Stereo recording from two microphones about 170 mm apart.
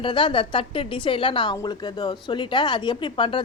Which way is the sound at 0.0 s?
30° left (ahead or behind).